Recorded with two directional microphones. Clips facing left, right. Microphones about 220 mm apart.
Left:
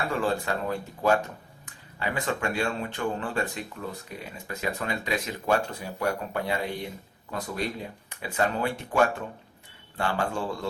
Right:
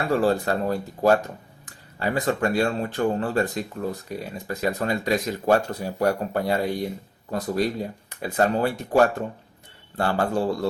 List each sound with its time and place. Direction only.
0.1 s speech: 40° right (ahead or behind)